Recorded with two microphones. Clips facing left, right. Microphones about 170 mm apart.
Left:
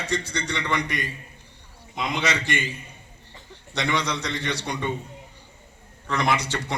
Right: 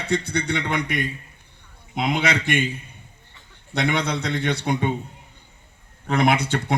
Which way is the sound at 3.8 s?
55° right (ahead or behind).